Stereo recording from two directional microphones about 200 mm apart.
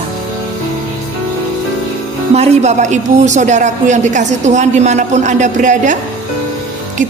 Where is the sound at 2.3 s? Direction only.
35° right (ahead or behind).